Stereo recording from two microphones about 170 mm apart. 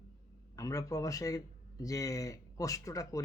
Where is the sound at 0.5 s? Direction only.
20° left (ahead or behind).